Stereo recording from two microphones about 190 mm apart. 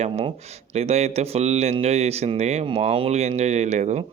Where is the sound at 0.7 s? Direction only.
35° right (ahead or behind).